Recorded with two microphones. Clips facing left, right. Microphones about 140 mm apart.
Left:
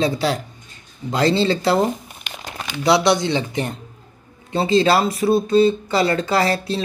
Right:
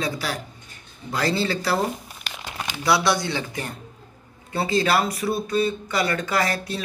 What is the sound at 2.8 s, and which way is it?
Speech, 20° left (ahead or behind).